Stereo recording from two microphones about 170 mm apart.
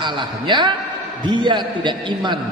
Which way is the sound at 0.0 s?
25° right (ahead or behind).